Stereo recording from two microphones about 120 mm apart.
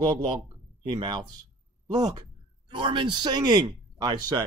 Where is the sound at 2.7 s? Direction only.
45° right (ahead or behind).